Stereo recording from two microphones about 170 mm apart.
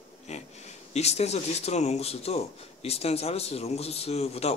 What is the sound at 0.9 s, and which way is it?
Speech, 40° left (ahead or behind).